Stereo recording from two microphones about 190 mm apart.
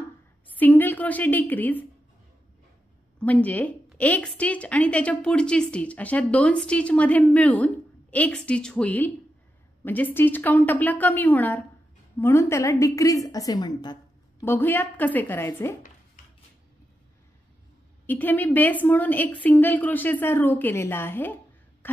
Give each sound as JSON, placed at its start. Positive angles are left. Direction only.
{"t": 0.6, "sound": "a woman's voice", "side_deg": 10}
{"t": 3.2, "sound": "a woman's voice", "side_deg": 5}
{"t": 14.4, "sound": "a woman's voice", "side_deg": 10}
{"t": 18.0, "sound": "a woman's voice", "side_deg": 10}
{"t": 21.8, "sound": "a sound", "side_deg": 10}